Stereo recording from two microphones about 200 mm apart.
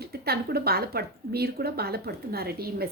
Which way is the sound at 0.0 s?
50° right (ahead or behind).